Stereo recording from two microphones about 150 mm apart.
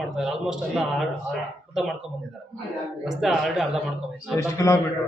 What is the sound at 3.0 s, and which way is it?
Speech, 5° right (ahead or behind).